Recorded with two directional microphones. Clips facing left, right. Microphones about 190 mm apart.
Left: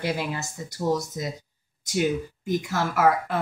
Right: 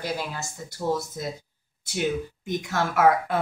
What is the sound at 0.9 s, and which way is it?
Speech, centre (ahead or behind).